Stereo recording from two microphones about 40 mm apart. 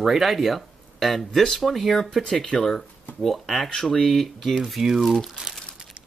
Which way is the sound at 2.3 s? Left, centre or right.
Centre.